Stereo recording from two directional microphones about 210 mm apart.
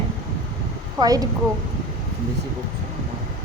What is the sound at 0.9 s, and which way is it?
Speech, 20° right (ahead or behind).